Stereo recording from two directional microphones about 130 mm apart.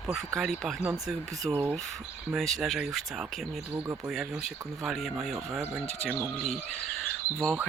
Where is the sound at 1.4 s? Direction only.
15° right (ahead or behind).